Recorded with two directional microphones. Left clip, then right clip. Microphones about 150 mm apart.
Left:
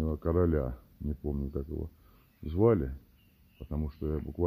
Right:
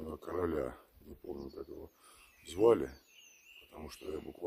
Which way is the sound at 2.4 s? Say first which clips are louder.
Left 1 dB; 15° right (ahead or behind).